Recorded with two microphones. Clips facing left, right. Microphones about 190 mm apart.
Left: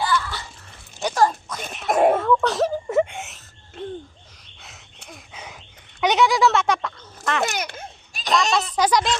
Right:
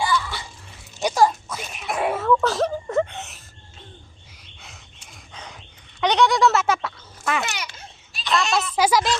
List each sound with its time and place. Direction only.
0.0 s biting: 10° right (ahead or behind)
1.0 s zipper: 10° right (ahead or behind)
1.9 s wail: 45° left (ahead or behind)
2.1 s wail: 5° right (ahead or behind)
5.1 s a sound: 5° left (ahead or behind)
7.4 s children playing: 50° left (ahead or behind)
8.4 s a sound: 5° right (ahead or behind)